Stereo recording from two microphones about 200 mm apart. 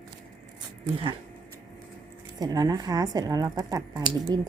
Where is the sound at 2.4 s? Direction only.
20° right (ahead or behind).